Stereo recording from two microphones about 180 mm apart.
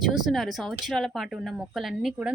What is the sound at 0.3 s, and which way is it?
Speech, centre (ahead or behind).